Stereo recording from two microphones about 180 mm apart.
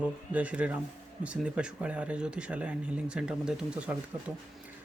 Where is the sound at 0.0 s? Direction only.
5° right (ahead or behind).